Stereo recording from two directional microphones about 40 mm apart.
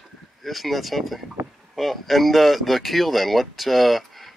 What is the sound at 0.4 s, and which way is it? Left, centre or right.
Speech, centre.